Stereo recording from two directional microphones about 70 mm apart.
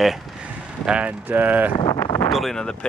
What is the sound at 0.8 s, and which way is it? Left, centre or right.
Speech, centre.